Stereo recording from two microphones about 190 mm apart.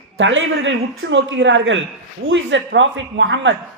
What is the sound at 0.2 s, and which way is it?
A man's voice, 75° right (ahead or behind).